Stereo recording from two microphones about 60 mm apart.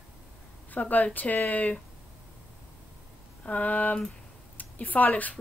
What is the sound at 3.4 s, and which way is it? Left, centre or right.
Speech, left.